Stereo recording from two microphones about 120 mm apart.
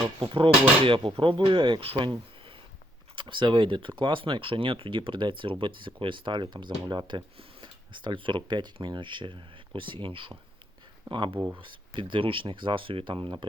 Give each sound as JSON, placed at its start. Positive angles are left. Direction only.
{"t": 0.2, "sound": "speech", "side_deg": -45}